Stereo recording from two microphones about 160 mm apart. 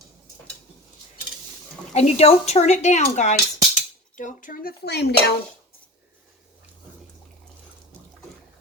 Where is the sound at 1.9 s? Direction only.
40° left (ahead or behind); by 5.1 s 90° left.